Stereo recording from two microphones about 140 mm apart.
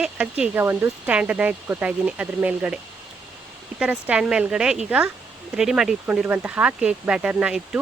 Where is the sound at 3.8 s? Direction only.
10° right (ahead or behind).